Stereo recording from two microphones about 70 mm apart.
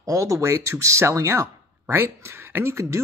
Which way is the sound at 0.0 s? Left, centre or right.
Right.